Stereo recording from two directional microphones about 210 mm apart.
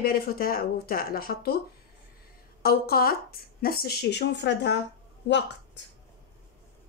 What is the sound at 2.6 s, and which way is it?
Speech, 45° left (ahead or behind).